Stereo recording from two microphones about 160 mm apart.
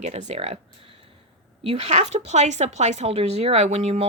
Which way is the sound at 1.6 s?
45° right (ahead or behind).